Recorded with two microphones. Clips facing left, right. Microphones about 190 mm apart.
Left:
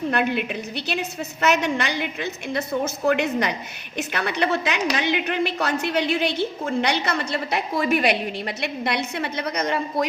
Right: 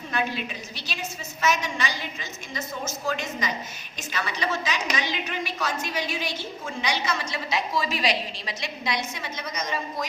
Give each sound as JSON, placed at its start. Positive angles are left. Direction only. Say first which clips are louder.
{"t": 0.1, "sound": "a woman's voice", "louder": "left 2 dB", "side_deg": 60}